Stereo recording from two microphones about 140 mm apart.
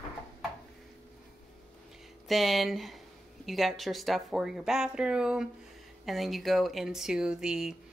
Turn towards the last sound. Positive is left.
turn(degrees=-5)  # may be behind; listen again after turning